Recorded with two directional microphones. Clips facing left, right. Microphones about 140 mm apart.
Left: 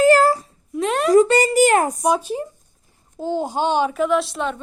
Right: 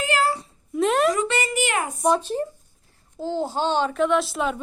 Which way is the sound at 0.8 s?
Centre (ahead or behind).